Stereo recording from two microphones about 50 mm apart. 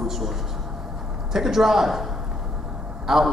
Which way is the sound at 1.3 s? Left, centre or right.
Centre.